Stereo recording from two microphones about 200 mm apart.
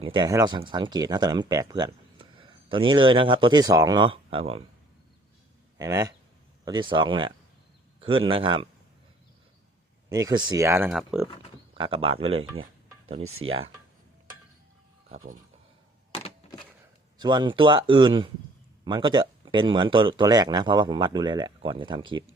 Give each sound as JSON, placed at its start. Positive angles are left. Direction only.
{"t": 0.0, "sound": "speech", "side_deg": -25}
{"t": 5.7, "sound": "speech", "side_deg": -15}
{"t": 10.1, "sound": "speech", "side_deg": -20}
{"t": 10.8, "sound": "speech", "side_deg": 0}
{"t": 11.7, "sound": "speech", "side_deg": -25}
{"t": 13.2, "sound": "speech", "side_deg": -90}
{"t": 17.2, "sound": "speech", "side_deg": -20}